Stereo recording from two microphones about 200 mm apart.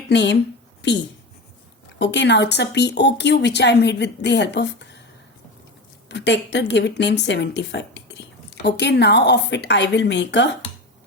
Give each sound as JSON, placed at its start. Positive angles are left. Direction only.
{"t": 0.1, "sound": "speech", "side_deg": 60}
{"t": 2.0, "sound": "a woman's voice", "side_deg": 60}
{"t": 6.1, "sound": "a woman's voice", "side_deg": 60}